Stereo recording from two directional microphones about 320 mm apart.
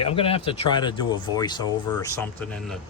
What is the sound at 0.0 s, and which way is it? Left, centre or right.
Speech, centre.